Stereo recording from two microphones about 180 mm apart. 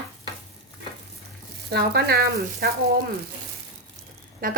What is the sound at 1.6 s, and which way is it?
Speech, 65° right (ahead or behind).